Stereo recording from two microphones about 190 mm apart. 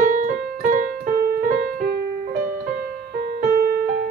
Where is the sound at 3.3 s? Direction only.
50° right (ahead or behind).